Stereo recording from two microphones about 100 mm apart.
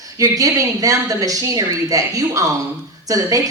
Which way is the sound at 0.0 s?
35° right (ahead or behind).